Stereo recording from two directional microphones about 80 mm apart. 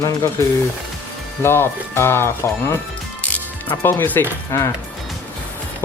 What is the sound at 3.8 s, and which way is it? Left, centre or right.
Speech, left.